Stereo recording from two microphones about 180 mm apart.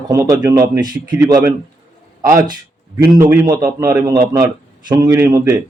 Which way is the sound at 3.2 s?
15° right (ahead or behind).